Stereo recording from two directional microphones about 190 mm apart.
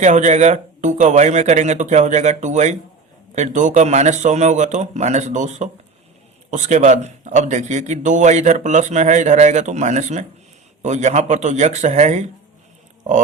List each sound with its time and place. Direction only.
0.0 s a man's voice: 40° right (ahead or behind)